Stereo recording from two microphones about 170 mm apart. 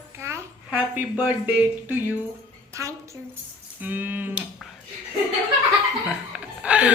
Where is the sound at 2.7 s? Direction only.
15° right (ahead or behind).